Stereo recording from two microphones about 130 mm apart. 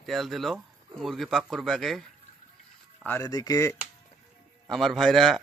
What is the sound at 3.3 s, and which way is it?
Speech, 30° left (ahead or behind).